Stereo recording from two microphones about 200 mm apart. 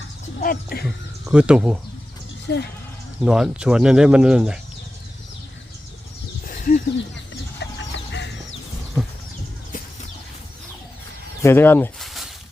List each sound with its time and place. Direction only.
0.3 s speech: 45° left (ahead or behind)
1.3 s speech: 5° right (ahead or behind)
2.5 s speech: 60° left (ahead or behind)
3.2 s speech: 5° right (ahead or behind)
6.4 s a sound: 45° left (ahead or behind)
7.6 s chicken: 65° left (ahead or behind)
11.4 s speech: 10° left (ahead or behind)
12.0 s a sound: centre (ahead or behind)